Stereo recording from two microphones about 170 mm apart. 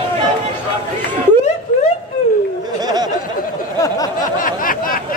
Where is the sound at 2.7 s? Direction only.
25° right (ahead or behind).